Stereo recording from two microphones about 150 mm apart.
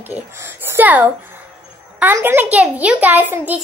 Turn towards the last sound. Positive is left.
turn(degrees=-10)  # may be behind; listen again after turning